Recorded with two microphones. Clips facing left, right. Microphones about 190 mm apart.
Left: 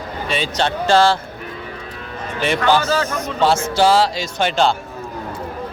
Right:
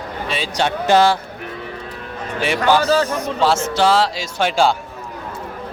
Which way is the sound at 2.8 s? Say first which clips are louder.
Right 3 dB; 35° right (ahead or behind).